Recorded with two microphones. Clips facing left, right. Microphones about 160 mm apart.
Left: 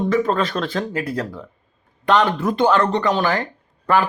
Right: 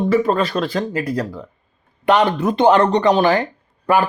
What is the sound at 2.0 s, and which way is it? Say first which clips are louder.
Speech: right 2 dB; 15° right (ahead or behind).